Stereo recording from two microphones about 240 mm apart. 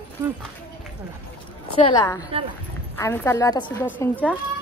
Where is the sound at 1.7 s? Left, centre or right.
Centre.